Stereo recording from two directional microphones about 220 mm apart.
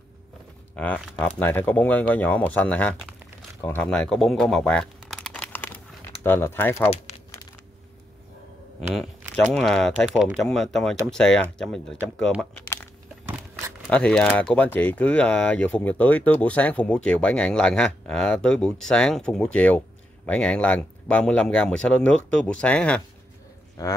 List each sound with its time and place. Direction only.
0.7 s speech: 5° left (ahead or behind)
6.9 s a sound: 30° left (ahead or behind)
9.3 s speech: 5° left (ahead or behind)
12.2 s a sound: 5° left (ahead or behind)
13.8 s speech: 5° left (ahead or behind)
23.8 s speech: 15° left (ahead or behind)